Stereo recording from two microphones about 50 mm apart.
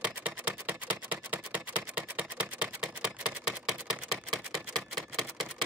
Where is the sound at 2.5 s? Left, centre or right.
Centre.